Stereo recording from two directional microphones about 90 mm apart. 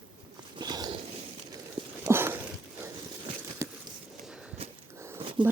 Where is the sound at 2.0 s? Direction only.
25° right (ahead or behind).